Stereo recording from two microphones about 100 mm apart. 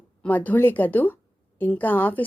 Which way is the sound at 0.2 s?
15° left (ahead or behind).